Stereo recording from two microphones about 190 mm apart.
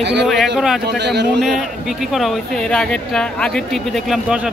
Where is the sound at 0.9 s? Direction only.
60° right (ahead or behind).